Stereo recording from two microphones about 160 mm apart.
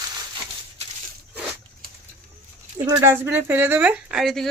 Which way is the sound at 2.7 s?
20° right (ahead or behind).